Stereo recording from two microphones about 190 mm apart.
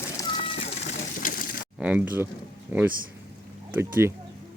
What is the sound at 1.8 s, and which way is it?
Speech, 5° right (ahead or behind).